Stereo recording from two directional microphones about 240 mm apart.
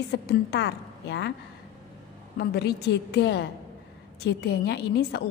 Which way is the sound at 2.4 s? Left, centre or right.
Left.